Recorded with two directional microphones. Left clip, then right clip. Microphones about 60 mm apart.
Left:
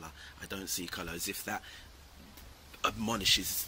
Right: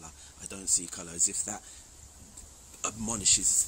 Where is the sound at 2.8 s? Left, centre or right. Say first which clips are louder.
Left 2 dB; right.